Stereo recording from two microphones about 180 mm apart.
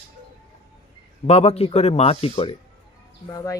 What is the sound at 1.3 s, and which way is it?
Speech, 35° left (ahead or behind).